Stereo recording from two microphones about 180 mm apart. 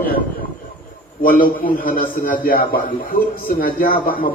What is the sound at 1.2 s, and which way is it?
A man's voice, 50° left (ahead or behind).